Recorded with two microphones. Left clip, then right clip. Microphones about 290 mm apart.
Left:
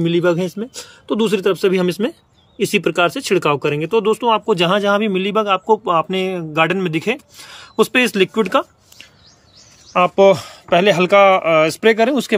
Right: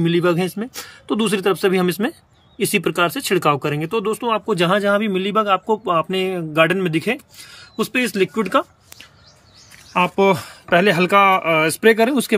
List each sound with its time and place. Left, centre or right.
0.0 s speech: centre
9.9 s speech: centre